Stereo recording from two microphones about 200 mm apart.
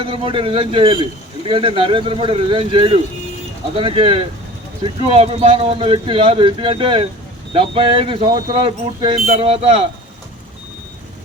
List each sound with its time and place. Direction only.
0.0 s speech: 25° right (ahead or behind)